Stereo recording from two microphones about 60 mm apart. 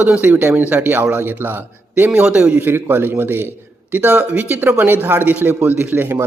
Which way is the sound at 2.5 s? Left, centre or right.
Right.